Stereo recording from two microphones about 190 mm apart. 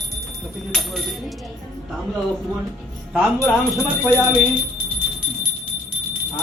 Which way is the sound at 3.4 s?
5° left (ahead or behind).